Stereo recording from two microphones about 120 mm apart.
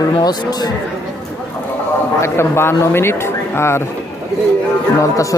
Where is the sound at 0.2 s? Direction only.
35° left (ahead or behind).